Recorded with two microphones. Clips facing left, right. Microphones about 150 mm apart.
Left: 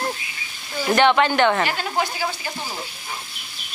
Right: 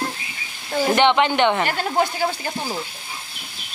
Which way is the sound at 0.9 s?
20° right (ahead or behind).